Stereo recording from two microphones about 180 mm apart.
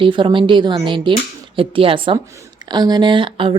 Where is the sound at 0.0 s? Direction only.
30° right (ahead or behind).